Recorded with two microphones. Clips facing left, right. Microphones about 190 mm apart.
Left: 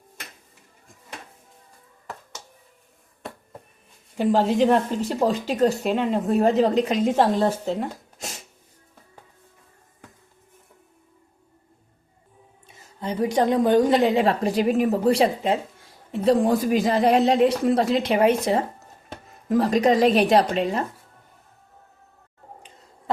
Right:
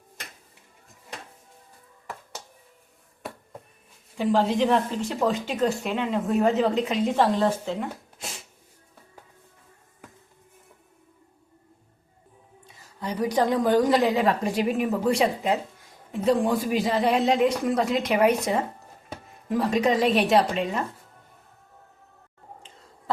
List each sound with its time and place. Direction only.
4.2 s speech: 45° left (ahead or behind)
12.6 s a woman's voice: 25° left (ahead or behind)
19.5 s speech: 40° left (ahead or behind)